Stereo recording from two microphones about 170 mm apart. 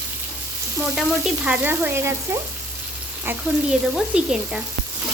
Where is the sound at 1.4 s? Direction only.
10° right (ahead or behind).